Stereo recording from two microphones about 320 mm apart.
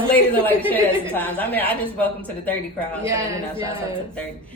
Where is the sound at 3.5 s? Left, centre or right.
Centre.